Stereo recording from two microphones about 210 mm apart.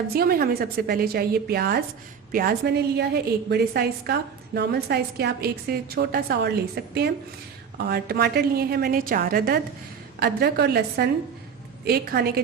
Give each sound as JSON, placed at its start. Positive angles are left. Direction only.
{"t": 0.1, "sound": "a woman's voice", "side_deg": -45}